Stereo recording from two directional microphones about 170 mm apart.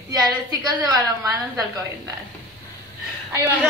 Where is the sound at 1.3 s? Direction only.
20° right (ahead or behind).